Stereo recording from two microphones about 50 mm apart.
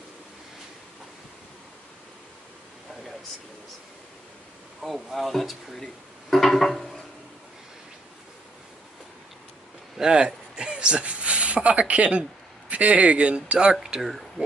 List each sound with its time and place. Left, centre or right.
4.8 s speech: centre
6.3 s a sound: centre
9.9 s speech: centre